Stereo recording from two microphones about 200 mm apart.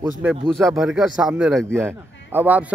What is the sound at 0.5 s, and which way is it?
A man's voice, centre (ahead or behind).